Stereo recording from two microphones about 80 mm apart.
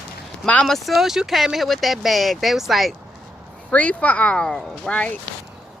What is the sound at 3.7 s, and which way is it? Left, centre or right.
Speech, centre.